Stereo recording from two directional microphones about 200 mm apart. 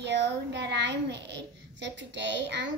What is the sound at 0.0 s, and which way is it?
A child's voice, 60° right (ahead or behind).